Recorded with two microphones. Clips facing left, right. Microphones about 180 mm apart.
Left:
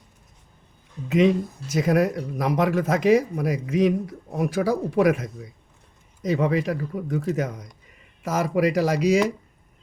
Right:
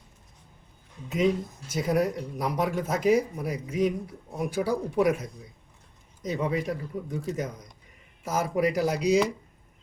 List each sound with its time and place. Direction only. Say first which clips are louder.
1.0 s speech: left 6 dB; 90° left